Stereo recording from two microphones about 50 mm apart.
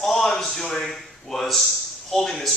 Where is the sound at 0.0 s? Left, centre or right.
Centre.